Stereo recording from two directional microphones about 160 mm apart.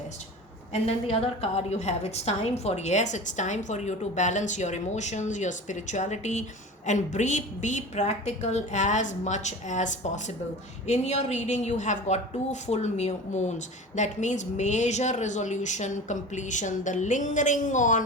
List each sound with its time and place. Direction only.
0.7 s a woman's voice: 40° left (ahead or behind)